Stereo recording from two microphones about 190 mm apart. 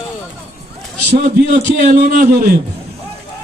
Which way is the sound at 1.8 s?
45° right (ahead or behind).